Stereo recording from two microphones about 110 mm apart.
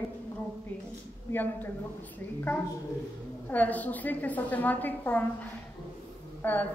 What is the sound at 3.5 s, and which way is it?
A woman's voice, 15° left (ahead or behind).